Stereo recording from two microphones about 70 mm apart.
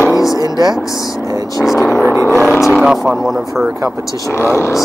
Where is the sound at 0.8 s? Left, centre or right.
Left.